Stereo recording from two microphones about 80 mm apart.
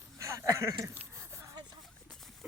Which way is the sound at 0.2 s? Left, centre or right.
Right.